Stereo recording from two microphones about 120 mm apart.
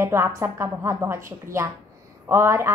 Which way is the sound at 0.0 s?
20° right (ahead or behind).